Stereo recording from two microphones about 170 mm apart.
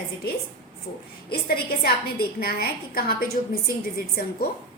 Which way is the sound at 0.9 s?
60° left (ahead or behind).